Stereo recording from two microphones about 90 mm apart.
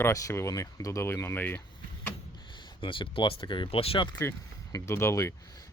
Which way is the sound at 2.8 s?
70° left (ahead or behind).